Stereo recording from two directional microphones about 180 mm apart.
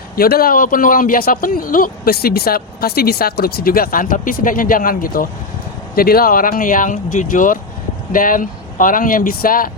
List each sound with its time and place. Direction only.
0.2 s speech: 55° left (ahead or behind)